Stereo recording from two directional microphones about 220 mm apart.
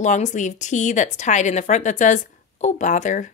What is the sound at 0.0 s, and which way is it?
Speech, 35° left (ahead or behind).